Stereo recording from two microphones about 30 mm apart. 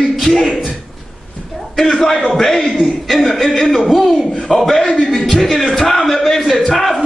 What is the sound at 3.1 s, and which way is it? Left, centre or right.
Speech, centre.